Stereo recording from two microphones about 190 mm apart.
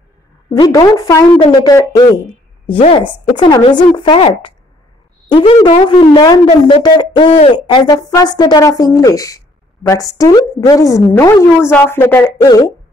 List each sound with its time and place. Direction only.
0.7 s a woman's voice: 15° left (ahead or behind)